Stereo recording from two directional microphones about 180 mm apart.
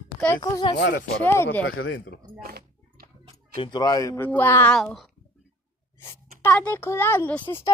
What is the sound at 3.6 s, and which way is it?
Speech, 25° left (ahead or behind).